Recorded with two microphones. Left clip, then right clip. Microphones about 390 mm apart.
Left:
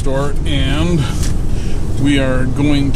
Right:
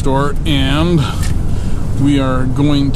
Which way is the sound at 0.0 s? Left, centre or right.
Centre.